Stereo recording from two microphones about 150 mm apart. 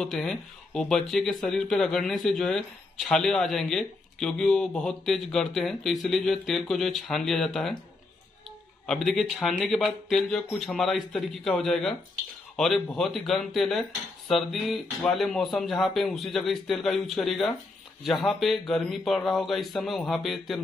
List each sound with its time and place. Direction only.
0.0 s speech: centre (ahead or behind)
8.8 s speech: 5° left (ahead or behind)